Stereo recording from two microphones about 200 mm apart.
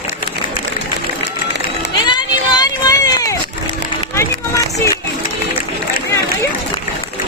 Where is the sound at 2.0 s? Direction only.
20° left (ahead or behind).